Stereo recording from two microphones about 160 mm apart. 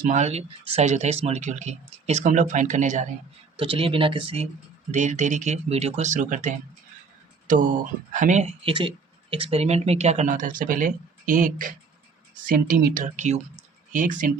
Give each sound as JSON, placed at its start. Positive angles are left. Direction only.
{"t": 0.0, "sound": "speech", "side_deg": -50}
{"t": 3.6, "sound": "speech", "side_deg": -35}
{"t": 4.9, "sound": "speech", "side_deg": -50}
{"t": 8.6, "sound": "speech", "side_deg": -30}